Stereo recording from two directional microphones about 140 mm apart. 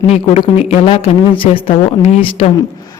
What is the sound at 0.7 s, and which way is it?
A woman's voice, 40° left (ahead or behind).